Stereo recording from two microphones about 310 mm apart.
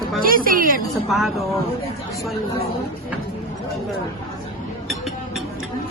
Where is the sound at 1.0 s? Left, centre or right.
Centre.